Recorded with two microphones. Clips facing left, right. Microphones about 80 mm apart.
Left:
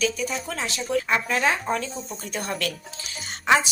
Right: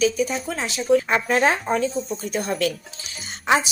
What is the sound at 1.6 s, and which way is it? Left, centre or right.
Speech, right.